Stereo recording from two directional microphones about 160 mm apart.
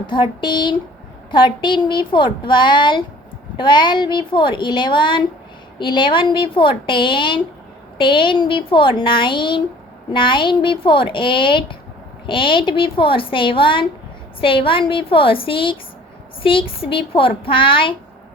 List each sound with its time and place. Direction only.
0.1 s a woman's voice: 30° left (ahead or behind)